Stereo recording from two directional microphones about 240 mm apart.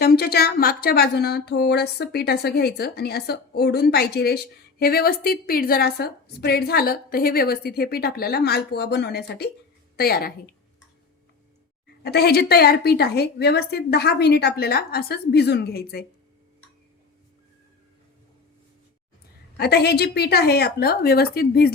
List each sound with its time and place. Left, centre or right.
0.0 s a woman's voice: left
12.0 s a woman's voice: left
19.5 s a woman's voice: left